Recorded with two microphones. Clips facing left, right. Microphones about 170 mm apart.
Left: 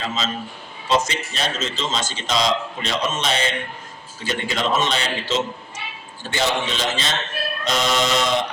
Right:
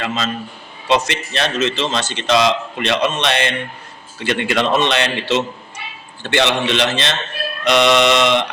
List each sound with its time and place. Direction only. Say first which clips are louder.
0.0 s a man's voice: right 4 dB; 65° right (ahead or behind)